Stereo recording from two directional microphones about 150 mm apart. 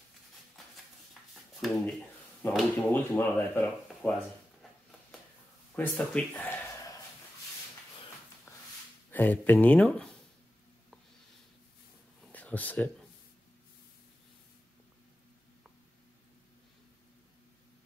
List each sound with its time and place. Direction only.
1.3 s a sound: centre (ahead or behind)
2.4 s speech: 15° left (ahead or behind)
5.8 s speech: 10° left (ahead or behind)
8.5 s dog: 20° left (ahead or behind)
9.1 s speech: 10° left (ahead or behind)
12.3 s speech: 10° left (ahead or behind)